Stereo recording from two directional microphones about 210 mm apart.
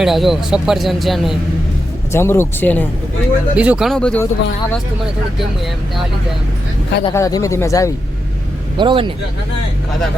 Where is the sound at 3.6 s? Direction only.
5° right (ahead or behind).